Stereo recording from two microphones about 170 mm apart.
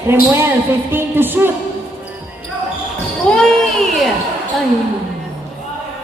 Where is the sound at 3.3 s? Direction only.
5° left (ahead or behind).